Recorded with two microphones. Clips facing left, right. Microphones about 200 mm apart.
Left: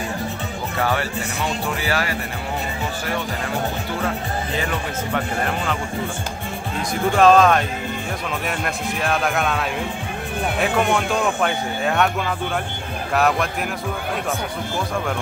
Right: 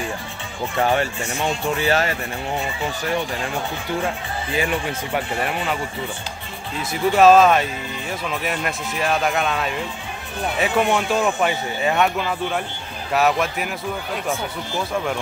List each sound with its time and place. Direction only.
1.8 s speech: 25° right (ahead or behind)
5.1 s speech: 10° right (ahead or behind)
7.1 s speech: 5° right (ahead or behind)